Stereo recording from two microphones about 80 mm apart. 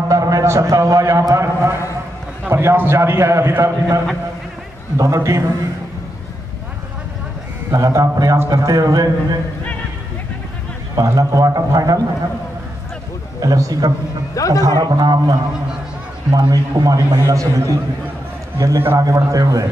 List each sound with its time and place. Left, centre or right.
0.1 s a man's voice: right
7.7 s a man's voice: right
11.0 s a man's voice: right
13.4 s a man's voice: right
14.3 s a man's voice: left
14.8 s a man's voice: right
18.9 s a man's voice: right